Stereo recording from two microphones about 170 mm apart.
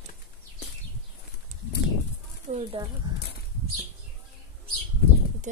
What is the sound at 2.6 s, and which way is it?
Speech, 30° right (ahead or behind).